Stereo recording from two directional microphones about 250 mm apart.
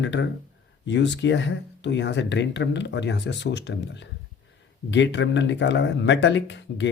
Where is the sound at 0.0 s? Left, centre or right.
Left.